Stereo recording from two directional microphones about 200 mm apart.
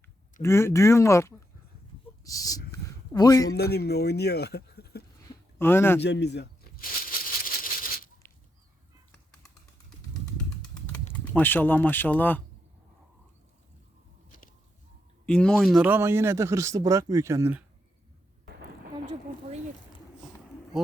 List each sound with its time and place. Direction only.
0.4 s speech: 15° left (ahead or behind)
2.2 s a sound: 15° left (ahead or behind)
3.5 s speech: 55° left (ahead or behind)
5.5 s speech: 10° left (ahead or behind)
6.0 s a sound: 60° left (ahead or behind)
10.3 s pigeon: 5° left (ahead or behind)
11.3 s speech: 10° left (ahead or behind)
14.3 s a sound: 40° left (ahead or behind)
15.3 s speech: 5° left (ahead or behind); by 17.6 s 15° right (ahead or behind)